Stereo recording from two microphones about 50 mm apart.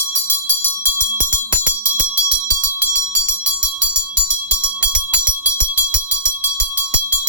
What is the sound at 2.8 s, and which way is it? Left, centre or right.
Bell, right.